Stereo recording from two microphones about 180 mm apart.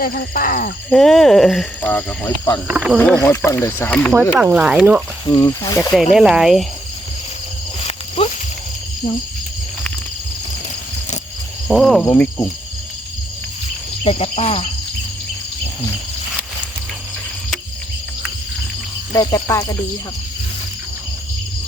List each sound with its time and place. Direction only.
0.0 s speech: 55° left (ahead or behind)
0.9 s speech: centre (ahead or behind)
2.6 s speech: 5° right (ahead or behind)
3.2 s speech: 15° left (ahead or behind)
4.4 s speech: 5° right (ahead or behind)
5.2 s speech: 25° left (ahead or behind)
5.9 s speech: centre (ahead or behind)
7.9 s a sound: 35° left (ahead or behind)
11.7 s speech: centre (ahead or behind)
12.0 s speech: 15° left (ahead or behind)
14.0 s cricket: 35° left (ahead or behind)
19.1 s speech: 20° left (ahead or behind)